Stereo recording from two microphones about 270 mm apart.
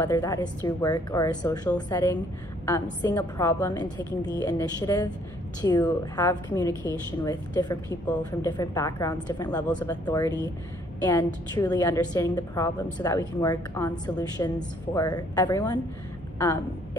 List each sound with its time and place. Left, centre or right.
0.0 s a woman's voice: centre